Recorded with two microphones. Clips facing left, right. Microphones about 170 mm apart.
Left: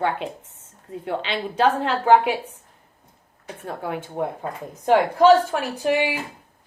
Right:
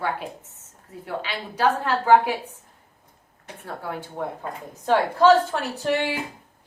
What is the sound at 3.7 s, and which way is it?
A woman's voice, 20° left (ahead or behind).